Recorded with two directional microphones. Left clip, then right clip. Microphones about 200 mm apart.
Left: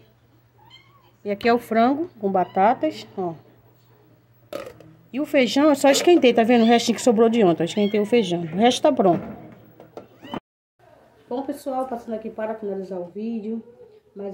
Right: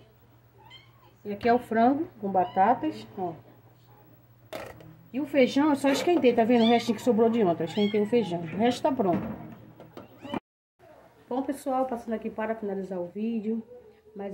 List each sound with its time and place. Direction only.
1.2 s speech: 65° left (ahead or behind)
5.1 s speech: 60° left (ahead or behind)
11.2 s speech: centre (ahead or behind)